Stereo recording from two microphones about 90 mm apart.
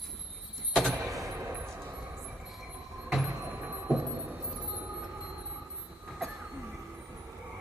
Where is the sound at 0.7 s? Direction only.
10° right (ahead or behind).